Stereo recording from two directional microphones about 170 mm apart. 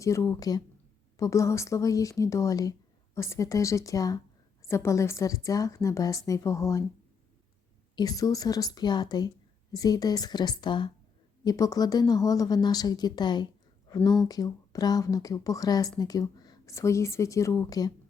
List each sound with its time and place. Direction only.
0.0 s a woman's voice: 15° left (ahead or behind)
7.9 s a woman's voice: 20° left (ahead or behind)